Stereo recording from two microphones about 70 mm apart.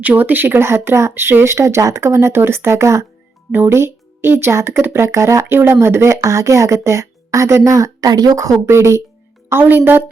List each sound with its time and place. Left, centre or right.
0.0 s speech: right
5.5 s speech: right
8.1 s speech: right
8.7 s speech: right
9.5 s speech: right